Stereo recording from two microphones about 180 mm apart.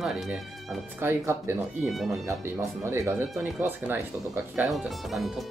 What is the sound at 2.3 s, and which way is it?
Speech, 15° right (ahead or behind).